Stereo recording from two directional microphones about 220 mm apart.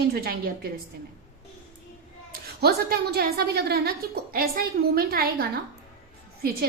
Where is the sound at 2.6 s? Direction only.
45° right (ahead or behind).